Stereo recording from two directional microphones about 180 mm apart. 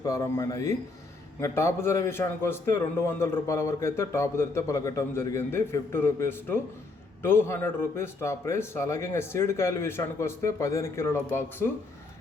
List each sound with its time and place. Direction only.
0.0 s a man's voice: 20° left (ahead or behind)